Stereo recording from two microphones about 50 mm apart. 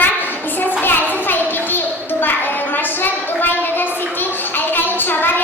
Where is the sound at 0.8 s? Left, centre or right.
Left.